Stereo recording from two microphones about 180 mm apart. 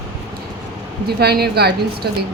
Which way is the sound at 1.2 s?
65° right (ahead or behind).